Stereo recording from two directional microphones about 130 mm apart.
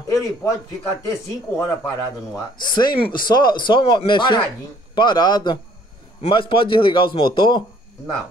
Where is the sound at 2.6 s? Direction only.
35° left (ahead or behind).